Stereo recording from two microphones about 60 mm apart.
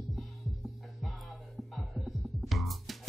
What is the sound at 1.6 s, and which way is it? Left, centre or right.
Music, centre.